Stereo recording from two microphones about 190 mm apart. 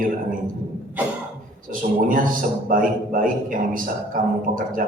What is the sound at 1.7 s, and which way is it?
A man's voice, 45° right (ahead or behind).